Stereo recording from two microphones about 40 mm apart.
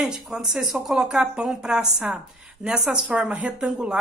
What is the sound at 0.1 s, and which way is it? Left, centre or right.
Speech, centre.